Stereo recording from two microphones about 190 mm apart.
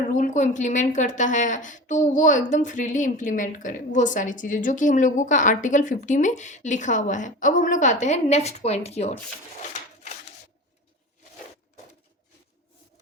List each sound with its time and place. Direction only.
0.1 s a woman's voice: 40° left (ahead or behind)